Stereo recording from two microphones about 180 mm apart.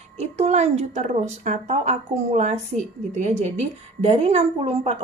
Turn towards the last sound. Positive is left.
turn(degrees=-35)  # may be behind; listen again after turning